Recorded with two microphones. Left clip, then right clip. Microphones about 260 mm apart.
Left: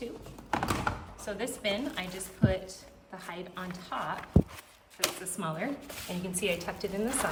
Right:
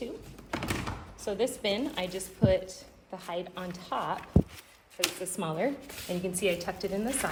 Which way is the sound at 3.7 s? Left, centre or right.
Left.